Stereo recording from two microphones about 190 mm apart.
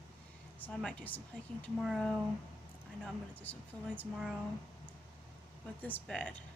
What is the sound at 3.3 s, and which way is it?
Speech, 10° left (ahead or behind).